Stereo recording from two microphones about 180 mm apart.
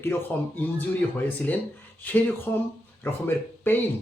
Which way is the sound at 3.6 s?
10° left (ahead or behind).